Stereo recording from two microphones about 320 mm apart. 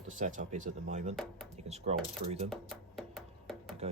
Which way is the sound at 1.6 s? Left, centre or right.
Centre.